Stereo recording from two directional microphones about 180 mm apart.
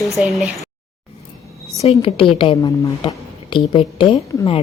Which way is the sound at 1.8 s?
35° left (ahead or behind).